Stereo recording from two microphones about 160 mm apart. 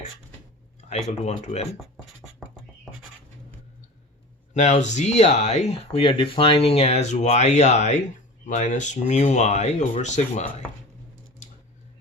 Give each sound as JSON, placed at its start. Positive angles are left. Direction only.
{"t": 0.8, "sound": "speech", "side_deg": 45}
{"t": 1.8, "sound": "writing", "side_deg": 0}
{"t": 4.5, "sound": "speech", "side_deg": 45}